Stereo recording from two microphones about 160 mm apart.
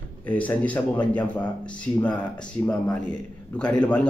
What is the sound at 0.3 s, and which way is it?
A man's voice, 10° left (ahead or behind).